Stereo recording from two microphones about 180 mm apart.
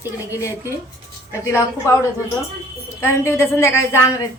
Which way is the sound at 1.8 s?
15° left (ahead or behind).